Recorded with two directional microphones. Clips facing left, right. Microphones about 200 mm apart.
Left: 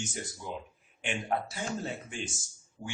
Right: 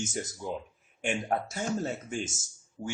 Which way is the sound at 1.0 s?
45° right (ahead or behind).